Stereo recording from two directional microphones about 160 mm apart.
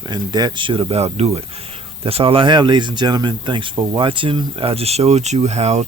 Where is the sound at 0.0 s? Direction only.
25° right (ahead or behind).